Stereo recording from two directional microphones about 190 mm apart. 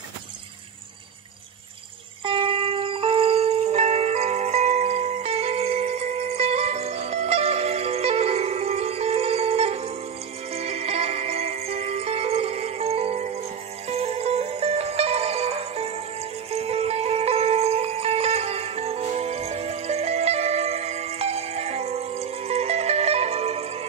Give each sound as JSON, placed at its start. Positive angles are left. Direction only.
{"t": 2.2, "sound": "music", "side_deg": -25}